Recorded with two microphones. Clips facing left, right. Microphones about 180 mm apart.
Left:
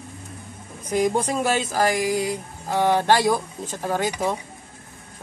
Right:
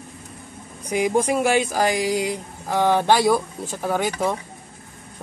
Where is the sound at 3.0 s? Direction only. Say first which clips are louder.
Right 1 dB; 15° right (ahead or behind).